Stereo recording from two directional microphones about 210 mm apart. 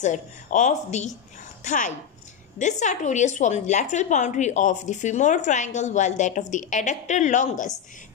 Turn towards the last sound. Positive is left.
turn(degrees=35)  # may be behind; listen again after turning